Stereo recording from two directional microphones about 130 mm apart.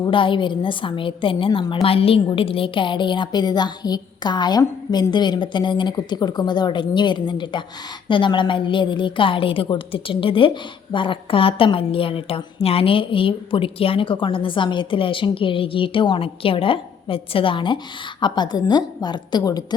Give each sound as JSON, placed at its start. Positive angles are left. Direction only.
{"t": 0.0, "sound": "a woman's voice", "side_deg": 40}